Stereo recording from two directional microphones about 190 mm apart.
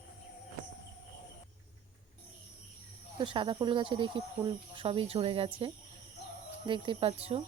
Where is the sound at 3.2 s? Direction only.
25° right (ahead or behind).